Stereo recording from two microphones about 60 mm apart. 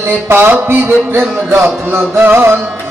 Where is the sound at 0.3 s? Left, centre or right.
Right.